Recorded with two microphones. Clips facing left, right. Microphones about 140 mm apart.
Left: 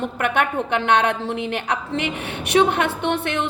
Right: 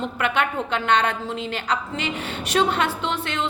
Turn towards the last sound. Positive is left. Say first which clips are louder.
# left 4 dB
turn(degrees=60)  # may be behind; listen again after turning